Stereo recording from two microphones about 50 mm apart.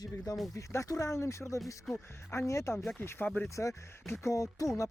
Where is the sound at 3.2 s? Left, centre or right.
Left.